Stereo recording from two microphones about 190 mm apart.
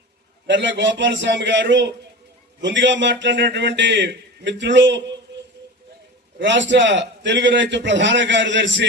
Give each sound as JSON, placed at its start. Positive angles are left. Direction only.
{"t": 0.4, "sound": "a man's voice", "side_deg": -70}
{"t": 5.3, "sound": "a sound", "side_deg": -65}
{"t": 6.4, "sound": "a man's voice", "side_deg": -70}